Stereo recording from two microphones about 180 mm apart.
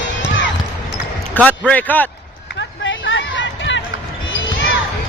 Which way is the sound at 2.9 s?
90° left.